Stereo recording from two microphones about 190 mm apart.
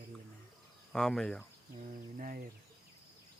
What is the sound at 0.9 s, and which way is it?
Speech, 5° left (ahead or behind).